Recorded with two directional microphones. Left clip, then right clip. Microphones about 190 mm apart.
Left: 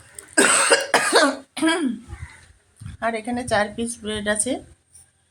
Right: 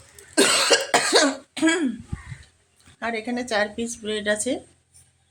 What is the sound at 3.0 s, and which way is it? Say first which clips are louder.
Speech: left 3 dB; centre (ahead or behind).